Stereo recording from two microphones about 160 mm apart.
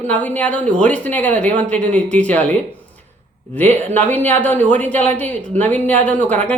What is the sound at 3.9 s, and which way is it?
A woman's voice, 10° left (ahead or behind).